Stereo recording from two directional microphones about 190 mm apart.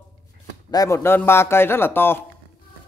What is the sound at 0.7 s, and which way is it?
A man's voice, 15° left (ahead or behind).